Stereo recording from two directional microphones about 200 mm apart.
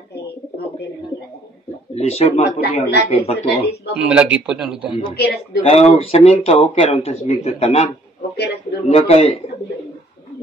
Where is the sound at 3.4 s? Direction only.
55° left (ahead or behind).